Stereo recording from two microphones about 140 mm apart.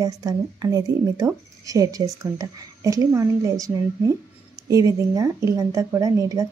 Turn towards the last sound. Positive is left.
turn(degrees=-25)  # may be behind; listen again after turning